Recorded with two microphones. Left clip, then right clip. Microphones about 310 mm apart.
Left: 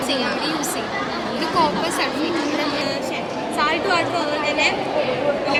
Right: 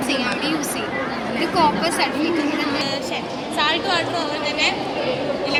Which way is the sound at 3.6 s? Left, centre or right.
Right.